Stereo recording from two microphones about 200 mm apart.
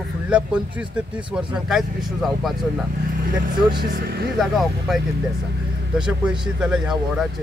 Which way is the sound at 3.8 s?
50° right (ahead or behind).